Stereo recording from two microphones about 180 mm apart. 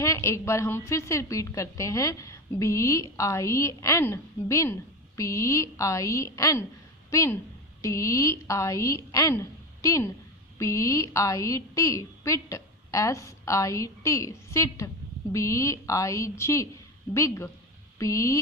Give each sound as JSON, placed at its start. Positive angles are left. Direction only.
{"t": 0.0, "sound": "a woman's voice", "side_deg": 15}